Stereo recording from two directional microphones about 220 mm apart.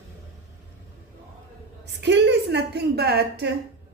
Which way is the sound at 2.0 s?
50° right (ahead or behind).